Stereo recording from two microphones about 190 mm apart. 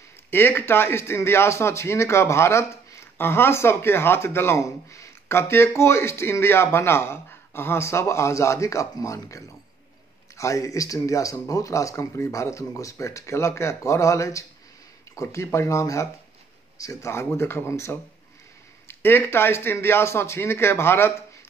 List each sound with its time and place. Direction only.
0.3 s speech: 10° left (ahead or behind)